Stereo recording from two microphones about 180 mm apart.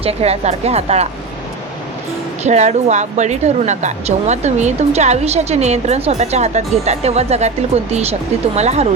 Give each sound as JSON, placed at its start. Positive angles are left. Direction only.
{"t": 0.0, "sound": "speech", "side_deg": -35}
{"t": 2.4, "sound": "speech", "side_deg": -40}